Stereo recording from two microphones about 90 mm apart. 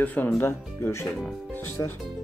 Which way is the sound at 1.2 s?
20° left (ahead or behind).